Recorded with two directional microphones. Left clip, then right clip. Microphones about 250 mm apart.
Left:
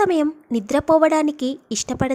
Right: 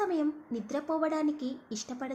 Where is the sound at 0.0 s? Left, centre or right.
Left.